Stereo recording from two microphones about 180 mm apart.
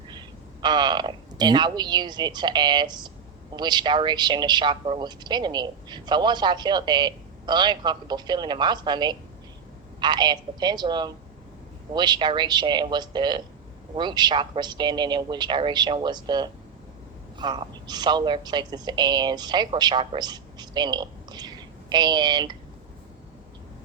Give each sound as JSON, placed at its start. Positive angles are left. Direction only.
{"t": 0.1, "sound": "a man's voice", "side_deg": -25}